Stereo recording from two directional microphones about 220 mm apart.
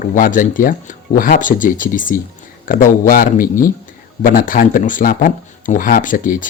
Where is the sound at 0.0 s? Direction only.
35° left (ahead or behind).